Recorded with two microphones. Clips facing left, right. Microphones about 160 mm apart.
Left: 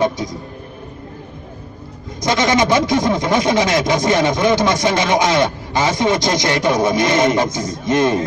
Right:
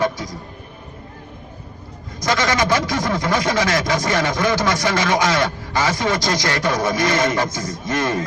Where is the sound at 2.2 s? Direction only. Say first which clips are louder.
Left 4 dB; 20° left (ahead or behind).